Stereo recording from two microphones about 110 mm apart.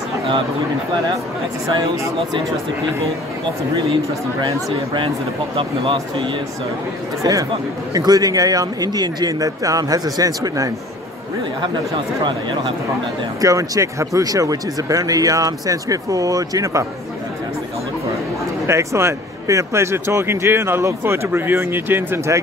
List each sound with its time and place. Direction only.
3.7 s speech: 45° right (ahead or behind)
5.6 s speech: 50° right (ahead or behind)
7.2 s speech: 40° right (ahead or behind)
11.6 s speech: 45° right (ahead or behind)
13.4 s speech: 30° right (ahead or behind)
18.7 s speech: 25° right (ahead or behind)